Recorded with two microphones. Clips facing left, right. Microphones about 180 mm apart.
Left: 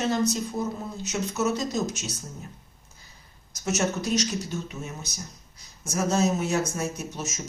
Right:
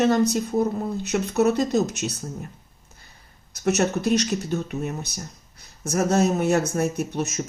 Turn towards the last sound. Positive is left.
turn(degrees=-60)  # may be behind; listen again after turning